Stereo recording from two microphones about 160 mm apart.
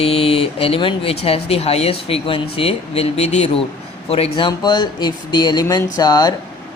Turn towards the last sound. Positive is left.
turn(degrees=25)  # may be behind; listen again after turning